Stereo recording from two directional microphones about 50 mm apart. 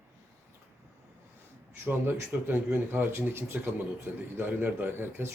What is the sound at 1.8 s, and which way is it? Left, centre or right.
Speech, right.